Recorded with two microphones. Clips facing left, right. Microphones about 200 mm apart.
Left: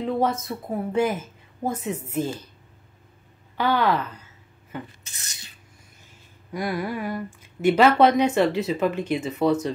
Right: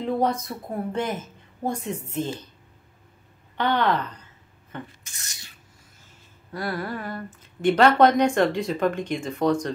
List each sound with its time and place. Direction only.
0.0 s a woman's voice: centre (ahead or behind)
3.5 s a woman's voice: 5° left (ahead or behind)
5.1 s a sound: 20° left (ahead or behind)
6.5 s speech: 15° left (ahead or behind)